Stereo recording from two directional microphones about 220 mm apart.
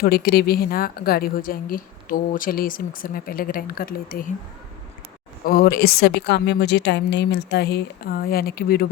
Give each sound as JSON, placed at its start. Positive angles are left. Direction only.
{"t": 0.0, "sound": "a woman's voice", "side_deg": 45}
{"t": 5.5, "sound": "a woman's voice", "side_deg": 45}